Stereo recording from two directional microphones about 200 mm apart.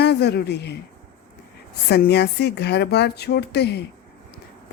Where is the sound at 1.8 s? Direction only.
55° left (ahead or behind).